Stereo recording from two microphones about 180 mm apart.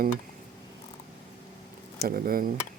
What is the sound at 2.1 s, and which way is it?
Speech, 55° right (ahead or behind).